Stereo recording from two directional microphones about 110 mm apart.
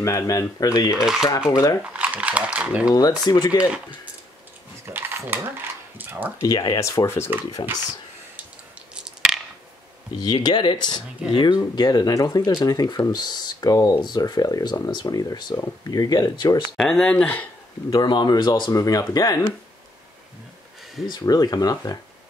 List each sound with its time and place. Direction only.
0.0 s speech: 25° left (ahead or behind)
0.9 s speech: 5° right (ahead or behind)
1.5 s speech: 35° left (ahead or behind)
1.8 s speech: 15° right (ahead or behind)
2.9 s speech: 35° left (ahead or behind)
3.5 s speech: 10° right (ahead or behind)
4.8 s a sound: 20° right (ahead or behind)
6.4 s speech: 35° left (ahead or behind)
7.3 s speech: 20° right (ahead or behind)
8.9 s a sound: 5° right (ahead or behind)
10.1 s speech: 40° left (ahead or behind)
16.7 s speech: 5° left (ahead or behind)
17.8 s speech: 40° left (ahead or behind)
21.1 s speech: 35° left (ahead or behind)